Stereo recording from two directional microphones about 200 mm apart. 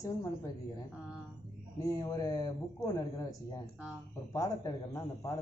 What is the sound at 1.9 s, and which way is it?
A man's voice, 20° left (ahead or behind).